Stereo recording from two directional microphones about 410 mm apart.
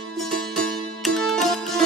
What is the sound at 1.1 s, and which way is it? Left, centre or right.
Music, centre.